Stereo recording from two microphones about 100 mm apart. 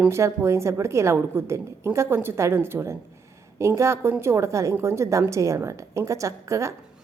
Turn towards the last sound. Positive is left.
turn(degrees=-30)  # may be behind; listen again after turning